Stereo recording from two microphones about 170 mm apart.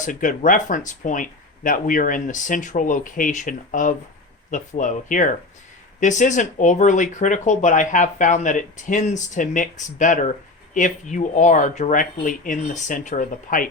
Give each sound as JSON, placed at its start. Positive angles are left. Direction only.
{"t": 0.0, "sound": "speech", "side_deg": 50}